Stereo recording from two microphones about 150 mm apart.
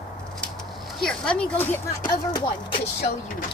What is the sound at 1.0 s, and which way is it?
Speech, 5° left (ahead or behind).